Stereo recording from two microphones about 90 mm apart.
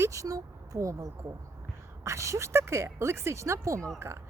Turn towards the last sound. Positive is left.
turn(degrees=-35)  # may be behind; listen again after turning